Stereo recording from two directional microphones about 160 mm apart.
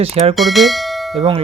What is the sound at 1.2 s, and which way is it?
Speech, 35° right (ahead or behind).